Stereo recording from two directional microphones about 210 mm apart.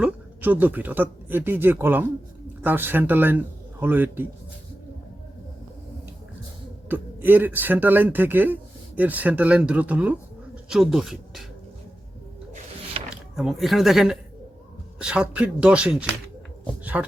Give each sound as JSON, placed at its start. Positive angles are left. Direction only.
{"t": 0.0, "sound": "a man's voice", "side_deg": -5}
{"t": 6.8, "sound": "speech", "side_deg": -10}
{"t": 12.9, "sound": "a sound", "side_deg": -30}
{"t": 13.3, "sound": "speech", "side_deg": 0}